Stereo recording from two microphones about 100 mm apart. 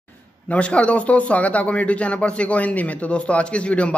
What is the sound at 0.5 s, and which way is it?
A man's voice, 10° left (ahead or behind).